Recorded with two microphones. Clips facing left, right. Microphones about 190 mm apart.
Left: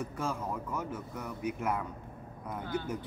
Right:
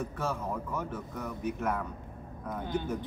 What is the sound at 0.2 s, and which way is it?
Speech, 10° left (ahead or behind).